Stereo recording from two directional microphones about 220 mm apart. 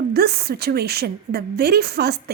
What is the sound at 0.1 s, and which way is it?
A woman's voice, 45° right (ahead or behind).